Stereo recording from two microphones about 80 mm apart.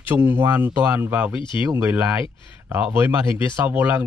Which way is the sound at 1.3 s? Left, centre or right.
Left.